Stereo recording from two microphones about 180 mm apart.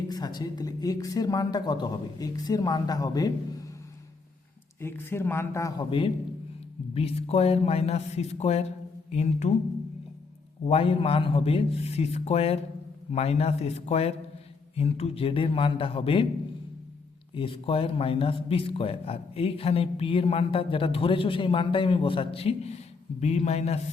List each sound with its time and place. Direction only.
0.1 s speech: 20° left (ahead or behind)
4.8 s a man's voice: 10° left (ahead or behind); by 9.6 s 40° left (ahead or behind)
10.7 s a man's voice: 30° left (ahead or behind)
17.3 s a man's voice: 30° left (ahead or behind)